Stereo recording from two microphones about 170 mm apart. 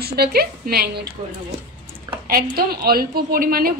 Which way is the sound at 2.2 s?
60° right (ahead or behind).